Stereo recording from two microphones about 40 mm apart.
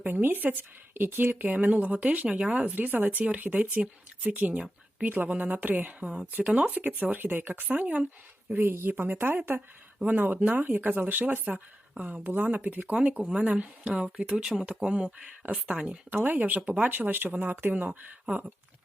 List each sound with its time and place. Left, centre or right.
0.0 s speech: right
2.7 s speech: right
4.5 s a sound: right
5.0 s speech: right
6.4 s speech: right
7.7 s speech: right
8.5 s speech: right
10.1 s speech: right
14.0 s speech: centre
14.8 s speech: right
16.0 s speech: right
16.6 s speech: right
16.8 s speech: right
17.8 s speech: right